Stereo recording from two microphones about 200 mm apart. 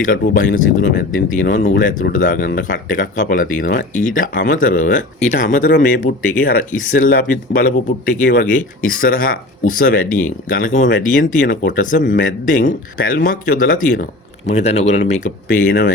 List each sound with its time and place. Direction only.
0.0 s speech: 40° left (ahead or behind)